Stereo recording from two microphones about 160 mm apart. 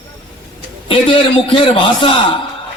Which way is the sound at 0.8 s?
35° left (ahead or behind).